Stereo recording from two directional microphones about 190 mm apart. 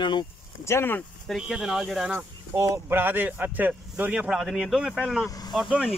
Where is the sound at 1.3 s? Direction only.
5° right (ahead or behind).